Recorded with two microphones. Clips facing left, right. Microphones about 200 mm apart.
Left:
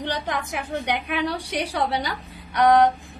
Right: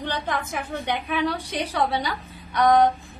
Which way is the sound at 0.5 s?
15° left (ahead or behind).